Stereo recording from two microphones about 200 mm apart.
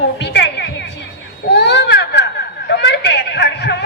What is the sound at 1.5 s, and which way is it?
Baby cry, 60° left (ahead or behind).